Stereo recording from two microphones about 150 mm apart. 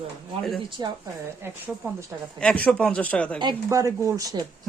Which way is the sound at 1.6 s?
15° right (ahead or behind).